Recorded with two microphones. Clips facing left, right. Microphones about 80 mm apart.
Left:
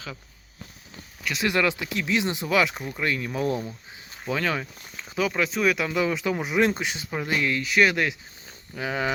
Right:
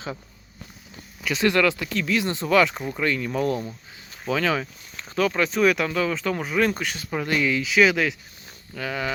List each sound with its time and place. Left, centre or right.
1.2 s speech: centre
1.5 s speech: centre
6.0 s speech: centre
8.7 s speech: left